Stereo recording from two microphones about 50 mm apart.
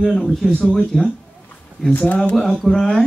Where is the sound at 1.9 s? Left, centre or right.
Left.